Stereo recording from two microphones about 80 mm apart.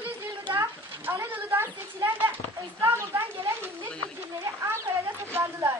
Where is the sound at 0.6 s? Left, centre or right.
Right.